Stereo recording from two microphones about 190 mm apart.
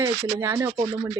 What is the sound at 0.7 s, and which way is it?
Speech, 25° right (ahead or behind).